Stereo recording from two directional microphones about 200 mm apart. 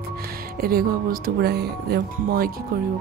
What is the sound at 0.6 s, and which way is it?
Speech, 50° right (ahead or behind).